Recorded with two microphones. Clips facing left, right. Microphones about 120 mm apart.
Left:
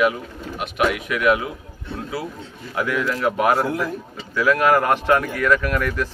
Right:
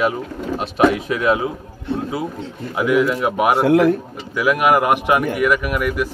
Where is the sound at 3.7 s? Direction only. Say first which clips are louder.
Right 11 dB; 75° right (ahead or behind).